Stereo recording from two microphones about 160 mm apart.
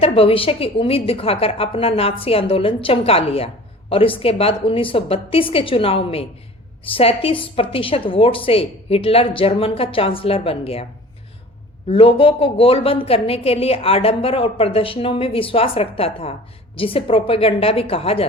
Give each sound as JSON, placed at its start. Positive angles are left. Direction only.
{"t": 0.0, "sound": "a woman's voice", "side_deg": 35}
{"t": 11.9, "sound": "a woman's voice", "side_deg": 35}